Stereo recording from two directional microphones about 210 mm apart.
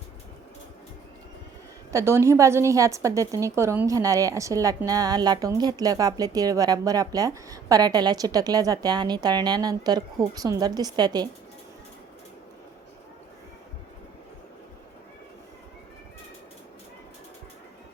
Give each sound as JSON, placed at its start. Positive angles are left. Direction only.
{"t": 1.9, "sound": "a woman's voice", "side_deg": -15}